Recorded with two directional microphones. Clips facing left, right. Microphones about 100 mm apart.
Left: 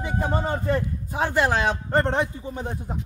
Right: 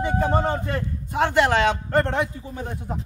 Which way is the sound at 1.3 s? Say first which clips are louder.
Right 3 dB; 90° right.